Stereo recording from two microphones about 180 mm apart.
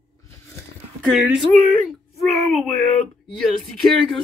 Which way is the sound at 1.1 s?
Centre (ahead or behind).